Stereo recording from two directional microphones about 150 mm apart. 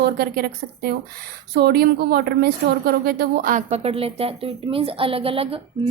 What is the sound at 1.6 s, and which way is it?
A woman's voice, 90° right.